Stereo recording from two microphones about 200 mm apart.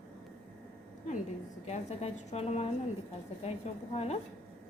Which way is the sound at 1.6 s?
35° left (ahead or behind).